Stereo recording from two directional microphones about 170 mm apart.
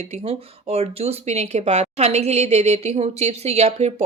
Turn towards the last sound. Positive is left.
turn(degrees=-40)  # may be behind; listen again after turning